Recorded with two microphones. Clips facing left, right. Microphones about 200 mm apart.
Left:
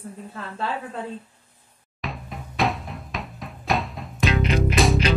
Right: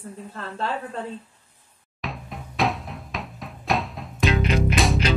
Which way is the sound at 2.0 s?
Centre (ahead or behind).